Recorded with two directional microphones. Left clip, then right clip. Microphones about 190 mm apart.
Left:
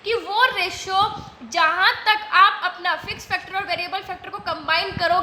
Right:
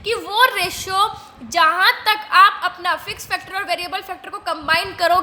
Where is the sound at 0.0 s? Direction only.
50° right (ahead or behind).